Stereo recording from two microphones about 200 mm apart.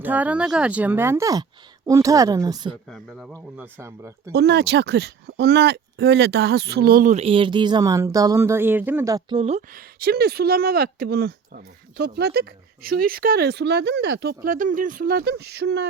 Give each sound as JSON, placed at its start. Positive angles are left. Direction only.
{"t": 0.0, "sound": "speech", "side_deg": -10}
{"t": 2.9, "sound": "a man's voice", "side_deg": -5}
{"t": 4.3, "sound": "speech", "side_deg": -55}
{"t": 9.4, "sound": "speech", "side_deg": -30}
{"t": 9.7, "sound": "speech", "side_deg": -50}